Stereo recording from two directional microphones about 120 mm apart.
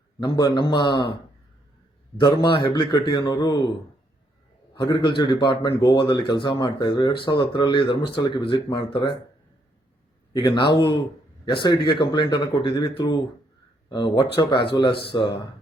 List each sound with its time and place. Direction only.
0.2 s speech: 35° left (ahead or behind)
2.1 s speech: 40° left (ahead or behind)
4.8 s speech: 40° left (ahead or behind)
10.3 s speech: 40° left (ahead or behind)